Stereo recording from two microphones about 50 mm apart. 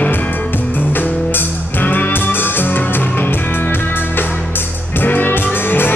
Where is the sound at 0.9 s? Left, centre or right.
Left.